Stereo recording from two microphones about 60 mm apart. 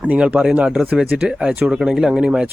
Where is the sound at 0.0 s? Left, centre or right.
Right.